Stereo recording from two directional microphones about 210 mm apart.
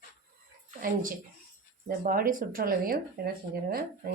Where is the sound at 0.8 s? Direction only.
40° right (ahead or behind).